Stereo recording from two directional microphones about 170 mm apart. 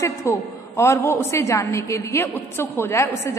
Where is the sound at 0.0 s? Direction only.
15° left (ahead or behind).